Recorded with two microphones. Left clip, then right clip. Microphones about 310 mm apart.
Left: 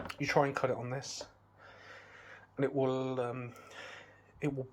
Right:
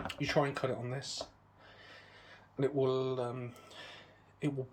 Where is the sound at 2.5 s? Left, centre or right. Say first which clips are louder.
Even; centre.